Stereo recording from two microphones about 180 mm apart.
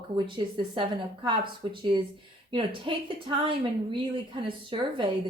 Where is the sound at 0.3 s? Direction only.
25° right (ahead or behind).